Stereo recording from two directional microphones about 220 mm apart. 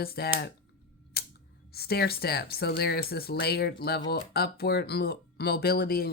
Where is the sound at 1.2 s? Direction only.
45° left (ahead or behind).